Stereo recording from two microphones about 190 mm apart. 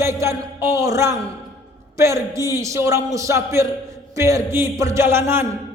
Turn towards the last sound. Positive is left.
turn(degrees=-10)  # may be behind; listen again after turning